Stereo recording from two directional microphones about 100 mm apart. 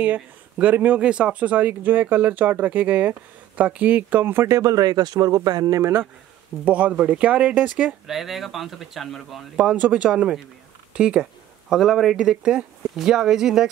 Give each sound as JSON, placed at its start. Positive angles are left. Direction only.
{"t": 0.0, "sound": "speech", "side_deg": -15}
{"t": 6.6, "sound": "speech", "side_deg": -15}
{"t": 9.6, "sound": "speech", "side_deg": -10}